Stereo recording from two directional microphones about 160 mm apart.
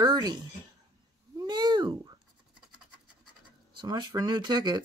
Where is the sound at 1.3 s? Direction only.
25° right (ahead or behind).